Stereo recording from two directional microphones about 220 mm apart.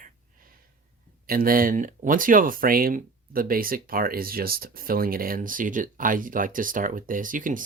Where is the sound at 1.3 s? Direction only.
40° right (ahead or behind).